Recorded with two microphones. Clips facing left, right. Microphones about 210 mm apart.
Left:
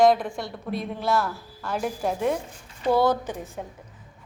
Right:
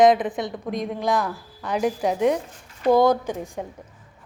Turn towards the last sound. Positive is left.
turn(degrees=-10)  # may be behind; listen again after turning